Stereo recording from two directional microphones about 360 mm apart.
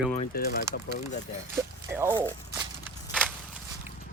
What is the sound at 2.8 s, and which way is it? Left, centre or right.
Walk, centre.